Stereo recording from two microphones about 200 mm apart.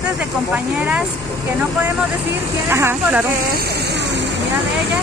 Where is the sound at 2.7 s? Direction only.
10° right (ahead or behind).